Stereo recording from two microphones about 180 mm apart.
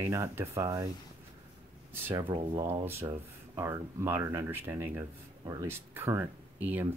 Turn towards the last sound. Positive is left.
turn(degrees=-10)  # may be behind; listen again after turning